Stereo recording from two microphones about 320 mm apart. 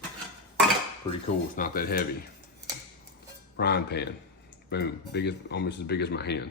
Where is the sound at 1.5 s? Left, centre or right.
Left.